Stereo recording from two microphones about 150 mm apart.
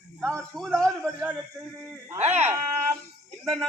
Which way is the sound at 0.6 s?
5° left (ahead or behind).